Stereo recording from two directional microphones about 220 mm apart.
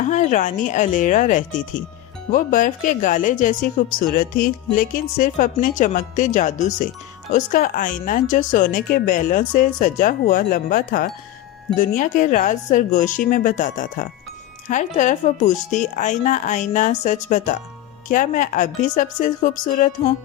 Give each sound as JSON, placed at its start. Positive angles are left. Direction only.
{"t": 0.0, "sound": "a woman's voice", "side_deg": 35}